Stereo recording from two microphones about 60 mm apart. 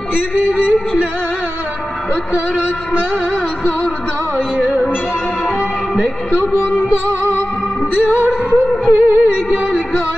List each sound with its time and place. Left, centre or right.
6.3 s music: right
8.2 s music: left
8.9 s music: right